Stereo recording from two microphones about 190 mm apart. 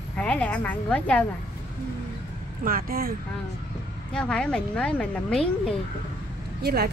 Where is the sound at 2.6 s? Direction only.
50° right (ahead or behind).